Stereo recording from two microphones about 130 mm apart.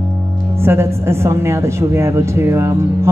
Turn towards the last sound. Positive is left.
turn(degrees=-20)  # may be behind; listen again after turning